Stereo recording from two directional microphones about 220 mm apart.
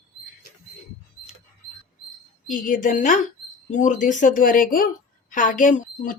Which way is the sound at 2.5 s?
40° left (ahead or behind).